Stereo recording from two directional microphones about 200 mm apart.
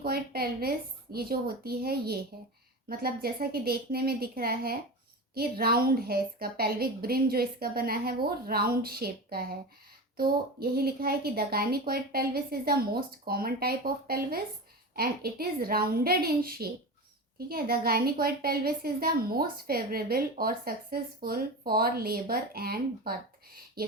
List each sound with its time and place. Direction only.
0.0 s a woman's voice: 50° right (ahead or behind)